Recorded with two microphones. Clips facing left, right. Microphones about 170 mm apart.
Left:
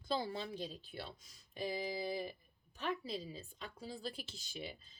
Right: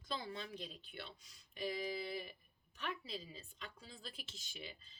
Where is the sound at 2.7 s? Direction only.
35° left (ahead or behind).